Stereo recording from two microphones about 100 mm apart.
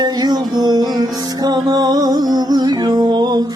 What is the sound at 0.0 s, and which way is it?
Music, 45° right (ahead or behind).